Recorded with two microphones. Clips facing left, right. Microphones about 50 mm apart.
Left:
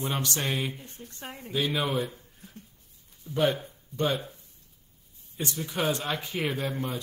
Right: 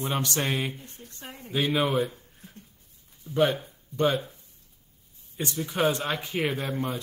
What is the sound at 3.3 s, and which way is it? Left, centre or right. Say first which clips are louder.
Speech: right 3 dB; centre.